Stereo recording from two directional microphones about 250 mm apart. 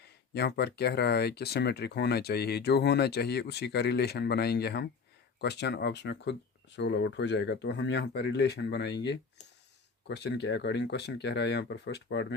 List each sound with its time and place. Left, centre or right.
0.3 s speech: left